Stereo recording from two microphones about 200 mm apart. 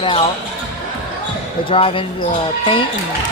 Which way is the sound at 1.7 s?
25° left (ahead or behind).